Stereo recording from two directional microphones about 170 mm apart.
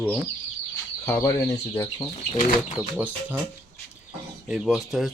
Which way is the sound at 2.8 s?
10° right (ahead or behind).